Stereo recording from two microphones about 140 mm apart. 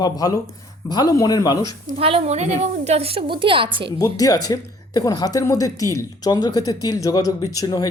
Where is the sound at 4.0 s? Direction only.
25° left (ahead or behind).